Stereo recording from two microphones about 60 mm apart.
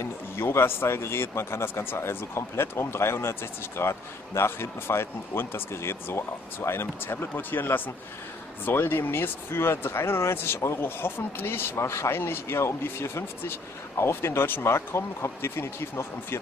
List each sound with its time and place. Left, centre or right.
0.0 s speech: left